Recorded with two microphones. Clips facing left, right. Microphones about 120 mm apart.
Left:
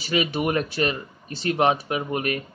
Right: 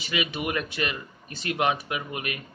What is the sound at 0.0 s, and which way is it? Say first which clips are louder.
Speech: left 6 dB; 35° left (ahead or behind).